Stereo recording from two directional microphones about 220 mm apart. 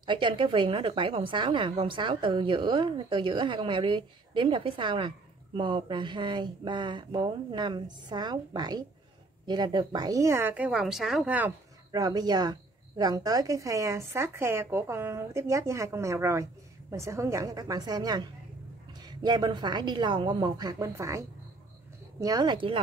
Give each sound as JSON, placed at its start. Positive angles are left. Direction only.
{"t": 0.0, "sound": "a woman's voice", "side_deg": -20}
{"t": 11.9, "sound": "a woman's voice", "side_deg": -20}